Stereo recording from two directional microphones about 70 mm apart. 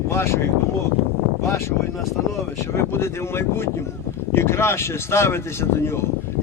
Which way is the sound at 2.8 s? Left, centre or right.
Left.